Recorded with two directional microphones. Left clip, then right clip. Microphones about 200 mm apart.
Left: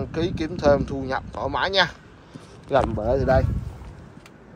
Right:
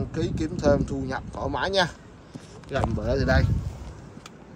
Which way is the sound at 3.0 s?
Centre (ahead or behind).